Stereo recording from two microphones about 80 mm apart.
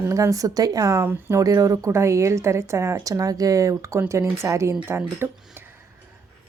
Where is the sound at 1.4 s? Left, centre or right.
Right.